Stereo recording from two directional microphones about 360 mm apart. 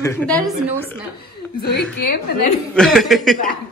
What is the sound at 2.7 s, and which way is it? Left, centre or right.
Speech, centre.